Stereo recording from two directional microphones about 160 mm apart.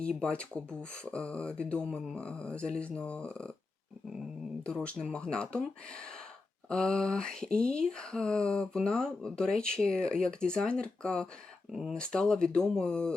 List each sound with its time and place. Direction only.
0.0 s speech: 5° left (ahead or behind)
4.6 s speech: 5° left (ahead or behind)